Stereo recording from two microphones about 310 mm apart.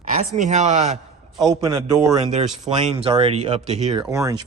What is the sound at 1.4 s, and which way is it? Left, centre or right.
A man's voice, centre.